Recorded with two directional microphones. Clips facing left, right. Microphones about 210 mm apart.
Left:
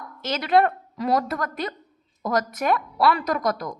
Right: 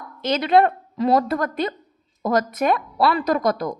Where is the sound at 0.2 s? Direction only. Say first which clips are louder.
Right 3 dB; 20° right (ahead or behind).